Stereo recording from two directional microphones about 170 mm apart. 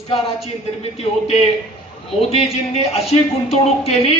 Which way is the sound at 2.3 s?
35° left (ahead or behind).